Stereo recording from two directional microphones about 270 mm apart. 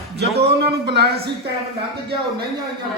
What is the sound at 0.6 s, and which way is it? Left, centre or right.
Speech, right.